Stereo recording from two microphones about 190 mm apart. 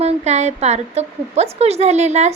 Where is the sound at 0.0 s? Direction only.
35° right (ahead or behind).